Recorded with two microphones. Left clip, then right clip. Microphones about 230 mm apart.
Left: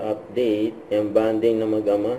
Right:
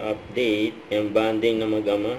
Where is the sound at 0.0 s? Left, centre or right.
Right.